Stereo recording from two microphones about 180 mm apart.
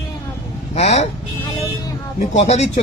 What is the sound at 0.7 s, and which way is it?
Speech, 40° left (ahead or behind).